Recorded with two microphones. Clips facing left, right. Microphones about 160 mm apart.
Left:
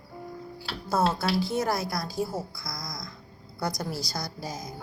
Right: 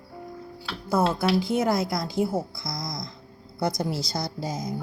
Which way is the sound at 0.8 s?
15° right (ahead or behind).